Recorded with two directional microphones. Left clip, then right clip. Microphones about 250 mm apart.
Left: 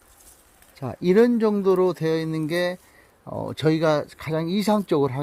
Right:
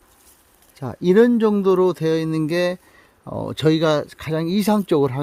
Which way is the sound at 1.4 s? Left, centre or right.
Right.